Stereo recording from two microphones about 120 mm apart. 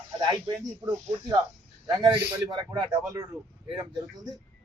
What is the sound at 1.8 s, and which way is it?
A man's voice, 35° right (ahead or behind).